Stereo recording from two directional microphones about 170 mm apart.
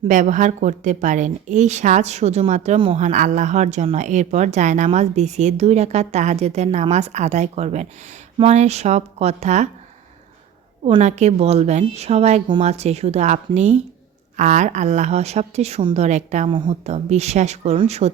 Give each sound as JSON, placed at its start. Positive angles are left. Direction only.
{"t": 0.1, "sound": "a woman's voice", "side_deg": -50}
{"t": 3.0, "sound": "a woman's voice", "side_deg": -45}
{"t": 10.8, "sound": "a woman's voice", "side_deg": -40}
{"t": 16.5, "sound": "a woman's voice", "side_deg": -30}